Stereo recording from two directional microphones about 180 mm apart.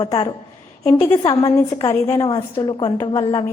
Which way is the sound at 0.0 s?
25° left (ahead or behind).